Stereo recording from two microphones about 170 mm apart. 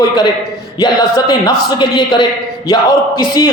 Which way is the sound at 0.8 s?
25° left (ahead or behind).